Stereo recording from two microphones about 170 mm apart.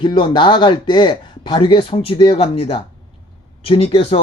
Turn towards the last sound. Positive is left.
turn(degrees=35)  # may be behind; listen again after turning